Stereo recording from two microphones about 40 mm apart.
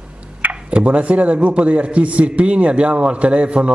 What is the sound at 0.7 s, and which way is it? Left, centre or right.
A man's voice, right.